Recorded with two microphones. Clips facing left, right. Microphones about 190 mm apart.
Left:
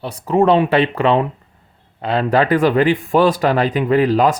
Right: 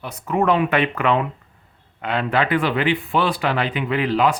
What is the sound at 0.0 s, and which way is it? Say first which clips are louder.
Speech: left 6 dB; 30° left (ahead or behind).